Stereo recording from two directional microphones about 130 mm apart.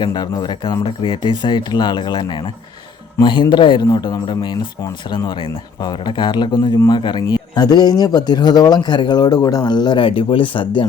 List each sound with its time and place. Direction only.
0.0 s speech: 35° left (ahead or behind)